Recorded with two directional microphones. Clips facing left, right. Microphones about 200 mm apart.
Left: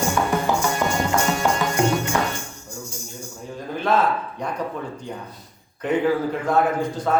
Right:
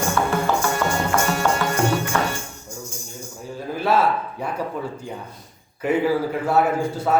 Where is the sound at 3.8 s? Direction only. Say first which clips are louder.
Right 1 dB; 10° right (ahead or behind).